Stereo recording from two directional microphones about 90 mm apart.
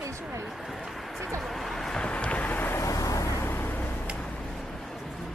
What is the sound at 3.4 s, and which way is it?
Vehicle, 25° left (ahead or behind).